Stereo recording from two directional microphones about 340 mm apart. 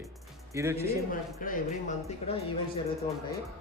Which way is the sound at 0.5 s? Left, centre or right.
Centre.